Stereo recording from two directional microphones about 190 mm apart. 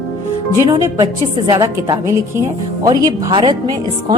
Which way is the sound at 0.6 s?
20° right (ahead or behind).